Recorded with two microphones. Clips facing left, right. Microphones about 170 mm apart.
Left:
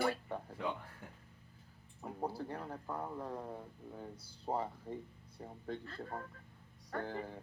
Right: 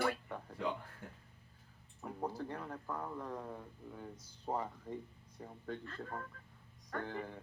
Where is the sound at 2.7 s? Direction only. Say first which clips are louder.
Left 1 dB; 15° left (ahead or behind).